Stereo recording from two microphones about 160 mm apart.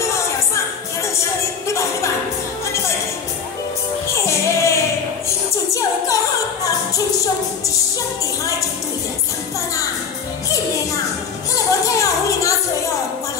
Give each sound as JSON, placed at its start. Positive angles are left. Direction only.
{"t": 1.7, "sound": "a sound", "side_deg": 20}
{"t": 4.1, "sound": "music", "side_deg": 15}
{"t": 11.5, "sound": "music", "side_deg": 20}